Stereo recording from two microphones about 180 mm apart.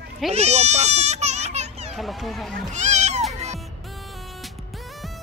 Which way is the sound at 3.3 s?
40° right (ahead or behind).